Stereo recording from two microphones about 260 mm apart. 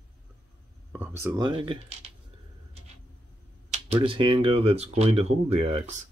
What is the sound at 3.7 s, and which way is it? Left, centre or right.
Speech, right.